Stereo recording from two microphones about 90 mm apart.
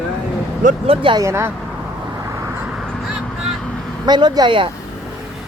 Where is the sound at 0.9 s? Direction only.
70° right (ahead or behind).